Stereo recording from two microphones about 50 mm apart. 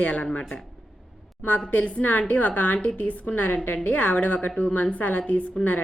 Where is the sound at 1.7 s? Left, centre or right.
Left.